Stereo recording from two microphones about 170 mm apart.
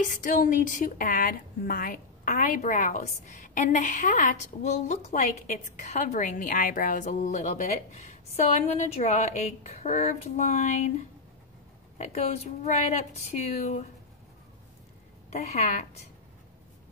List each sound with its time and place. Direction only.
0.1 s a woman's voice: 50° left (ahead or behind)
12.0 s speech: 40° left (ahead or behind)
15.2 s speech: 40° left (ahead or behind)